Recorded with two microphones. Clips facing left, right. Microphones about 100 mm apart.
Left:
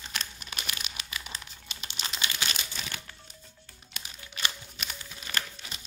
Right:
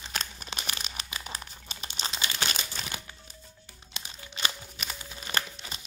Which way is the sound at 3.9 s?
25° right (ahead or behind).